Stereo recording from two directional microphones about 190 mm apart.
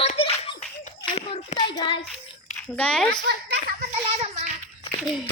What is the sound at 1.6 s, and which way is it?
Child singing, 25° left (ahead or behind).